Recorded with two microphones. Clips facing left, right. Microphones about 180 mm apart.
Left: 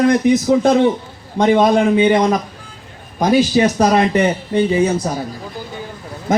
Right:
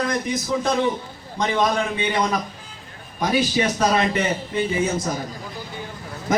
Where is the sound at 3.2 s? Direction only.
45° left (ahead or behind).